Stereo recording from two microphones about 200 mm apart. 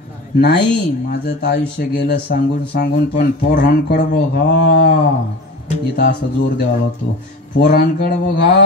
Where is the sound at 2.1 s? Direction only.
50° left (ahead or behind).